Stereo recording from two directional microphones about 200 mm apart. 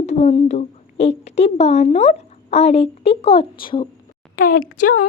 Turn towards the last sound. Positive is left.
turn(degrees=45)  # may be behind; listen again after turning